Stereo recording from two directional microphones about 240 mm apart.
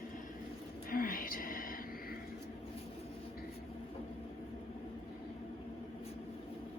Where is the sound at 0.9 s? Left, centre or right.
Left.